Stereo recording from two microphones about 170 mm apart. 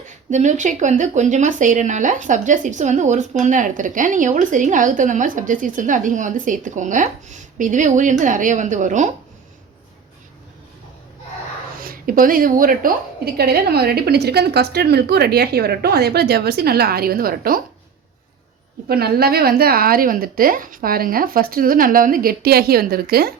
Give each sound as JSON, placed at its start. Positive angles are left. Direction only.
{"t": 0.3, "sound": "speech", "side_deg": -45}
{"t": 11.8, "sound": "a woman's voice", "side_deg": -55}
{"t": 18.9, "sound": "a woman's voice", "side_deg": -65}